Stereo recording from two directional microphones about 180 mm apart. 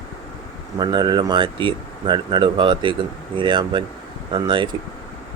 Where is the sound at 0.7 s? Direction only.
25° right (ahead or behind).